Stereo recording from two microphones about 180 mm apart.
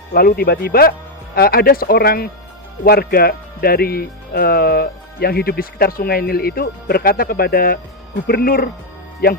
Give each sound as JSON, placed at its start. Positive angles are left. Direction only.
{"t": 0.1, "sound": "speech", "side_deg": 60}